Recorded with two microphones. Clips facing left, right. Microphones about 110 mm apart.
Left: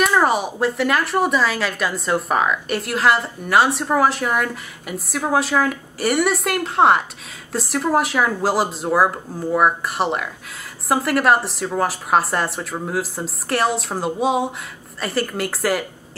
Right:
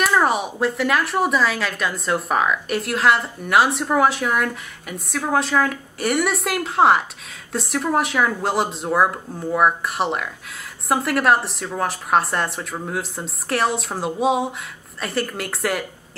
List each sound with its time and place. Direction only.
0.0 s speech: centre (ahead or behind)